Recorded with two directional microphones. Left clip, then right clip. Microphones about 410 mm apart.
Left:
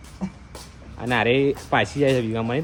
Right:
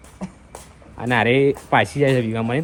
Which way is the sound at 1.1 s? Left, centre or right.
Centre.